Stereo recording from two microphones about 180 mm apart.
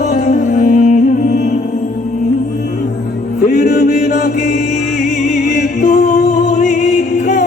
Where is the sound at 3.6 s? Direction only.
65° left (ahead or behind).